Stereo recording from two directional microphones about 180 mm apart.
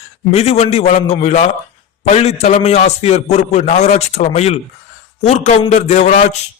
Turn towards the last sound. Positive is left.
turn(degrees=40)  # may be behind; listen again after turning